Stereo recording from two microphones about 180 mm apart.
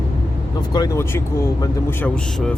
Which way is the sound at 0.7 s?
20° left (ahead or behind).